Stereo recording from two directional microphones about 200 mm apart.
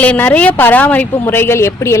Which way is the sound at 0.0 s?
10° left (ahead or behind).